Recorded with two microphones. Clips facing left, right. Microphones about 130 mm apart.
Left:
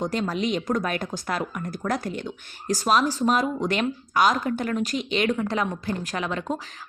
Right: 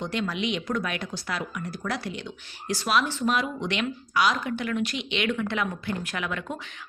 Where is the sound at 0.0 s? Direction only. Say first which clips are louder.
Left 3 dB; 40° left (ahead or behind).